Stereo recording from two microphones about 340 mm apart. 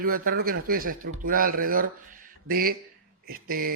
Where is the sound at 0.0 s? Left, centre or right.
Right.